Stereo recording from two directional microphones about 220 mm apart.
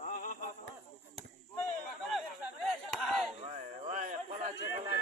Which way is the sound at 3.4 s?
30° right (ahead or behind).